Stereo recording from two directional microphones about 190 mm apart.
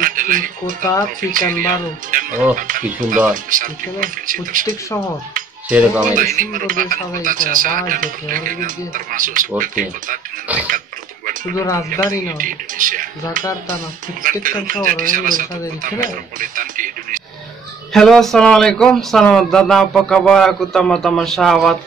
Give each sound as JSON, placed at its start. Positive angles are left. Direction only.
{"t": 0.0, "sound": "a sound", "side_deg": -45}
{"t": 1.0, "sound": "speech", "side_deg": -45}
{"t": 5.7, "sound": "speech", "side_deg": -5}
{"t": 6.3, "sound": "speech", "side_deg": -45}
{"t": 10.5, "sound": "pig", "side_deg": -10}
{"t": 11.5, "sound": "speech", "side_deg": 15}
{"t": 12.4, "sound": "speech", "side_deg": -45}
{"t": 14.4, "sound": "speech", "side_deg": -45}
{"t": 17.9, "sound": "speech", "side_deg": 0}